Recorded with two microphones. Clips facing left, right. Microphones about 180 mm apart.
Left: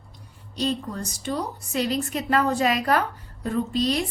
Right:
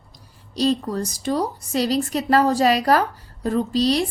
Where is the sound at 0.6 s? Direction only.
40° right (ahead or behind).